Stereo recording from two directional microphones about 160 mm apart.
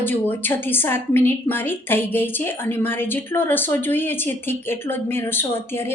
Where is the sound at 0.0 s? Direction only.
10° left (ahead or behind).